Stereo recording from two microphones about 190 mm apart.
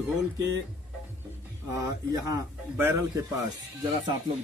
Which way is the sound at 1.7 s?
15° right (ahead or behind).